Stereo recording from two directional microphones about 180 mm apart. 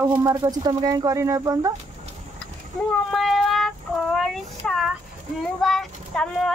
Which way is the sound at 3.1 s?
Centre (ahead or behind).